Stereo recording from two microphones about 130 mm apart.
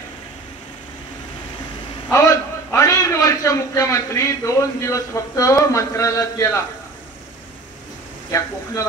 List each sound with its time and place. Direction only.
2.1 s a man's voice: 25° left (ahead or behind)
8.3 s speech: 25° left (ahead or behind)